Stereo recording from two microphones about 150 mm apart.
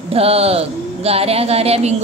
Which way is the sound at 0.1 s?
40° right (ahead or behind).